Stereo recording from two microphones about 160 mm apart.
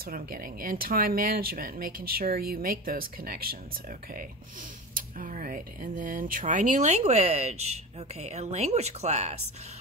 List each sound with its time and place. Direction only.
0.0 s speech: 65° right (ahead or behind)
4.9 s speech: 60° right (ahead or behind)